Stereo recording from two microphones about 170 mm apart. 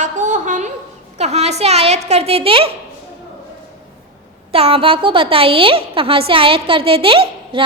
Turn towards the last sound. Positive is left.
turn(degrees=-30)  # may be behind; listen again after turning